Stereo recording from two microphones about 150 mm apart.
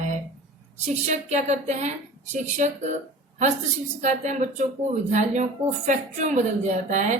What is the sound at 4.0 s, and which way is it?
A woman's voice, 50° right (ahead or behind).